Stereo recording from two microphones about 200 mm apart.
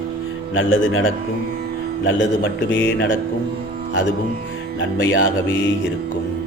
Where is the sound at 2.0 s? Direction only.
70° left (ahead or behind).